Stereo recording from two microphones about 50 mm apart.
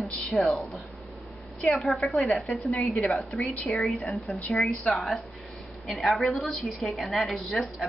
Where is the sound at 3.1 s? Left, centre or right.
Centre.